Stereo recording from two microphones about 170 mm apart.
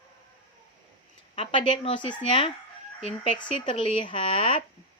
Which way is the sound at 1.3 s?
30° left (ahead or behind).